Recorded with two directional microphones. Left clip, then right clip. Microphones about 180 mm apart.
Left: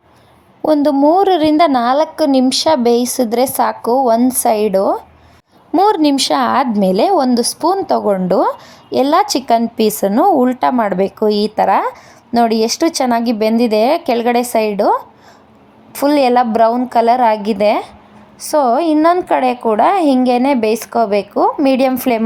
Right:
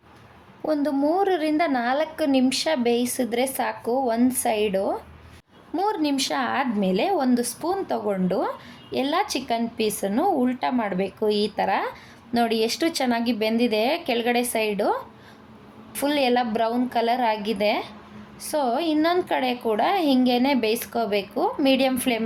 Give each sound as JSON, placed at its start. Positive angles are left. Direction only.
{"t": 0.6, "sound": "a woman's voice", "side_deg": 40}